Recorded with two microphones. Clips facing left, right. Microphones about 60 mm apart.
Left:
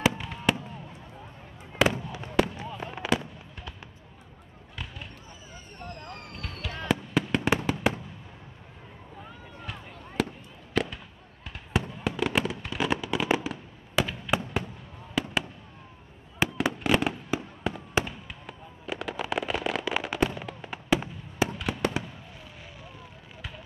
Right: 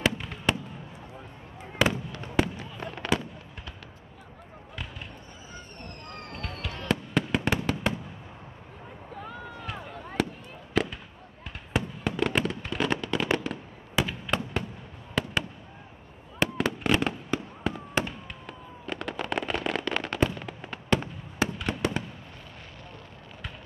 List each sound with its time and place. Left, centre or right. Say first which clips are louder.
0.0 s fireworks: left 1 dB; centre
1.8 s fireworks: left 1 dB; centre
5.5 s fireworks: left 2 dB; centre
10.2 s fireworks: even; centre
16.3 s fireworks: even; centre